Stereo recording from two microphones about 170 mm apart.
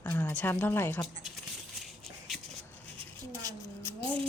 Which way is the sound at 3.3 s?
15° left (ahead or behind).